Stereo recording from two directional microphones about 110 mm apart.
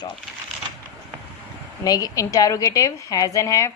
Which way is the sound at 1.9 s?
30° left (ahead or behind).